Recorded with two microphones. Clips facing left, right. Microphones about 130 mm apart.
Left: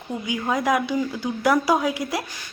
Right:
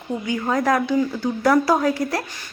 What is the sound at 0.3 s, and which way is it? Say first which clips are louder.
Speech: right 2 dB; 10° left (ahead or behind).